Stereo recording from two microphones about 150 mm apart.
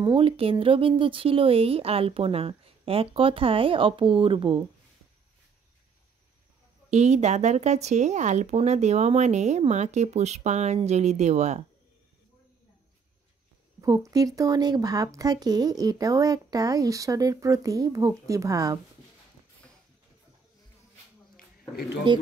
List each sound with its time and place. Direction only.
0.0 s speech: 35° right (ahead or behind)
6.9 s speech: 50° right (ahead or behind)
13.7 s speech: 25° right (ahead or behind)
22.1 s speech: 30° right (ahead or behind)